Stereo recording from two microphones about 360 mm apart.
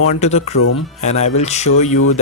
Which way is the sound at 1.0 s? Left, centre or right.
Centre.